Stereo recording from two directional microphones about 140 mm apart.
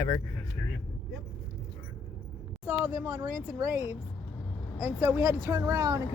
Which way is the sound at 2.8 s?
15° right (ahead or behind).